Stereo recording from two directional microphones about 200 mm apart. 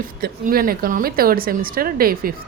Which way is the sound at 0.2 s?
45° right (ahead or behind).